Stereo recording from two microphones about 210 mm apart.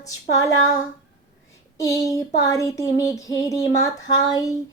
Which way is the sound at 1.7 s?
15° left (ahead or behind).